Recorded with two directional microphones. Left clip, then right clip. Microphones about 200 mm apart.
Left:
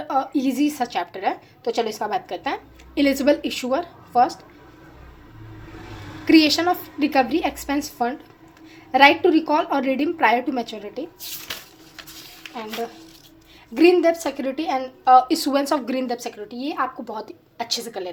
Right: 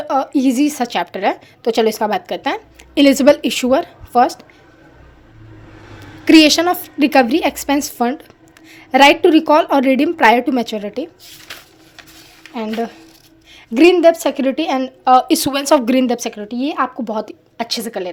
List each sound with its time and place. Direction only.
0.1 s a woman's voice: 45° right (ahead or behind)
6.2 s a woman's voice: 50° right (ahead or behind)
13.7 s a woman's voice: 50° right (ahead or behind)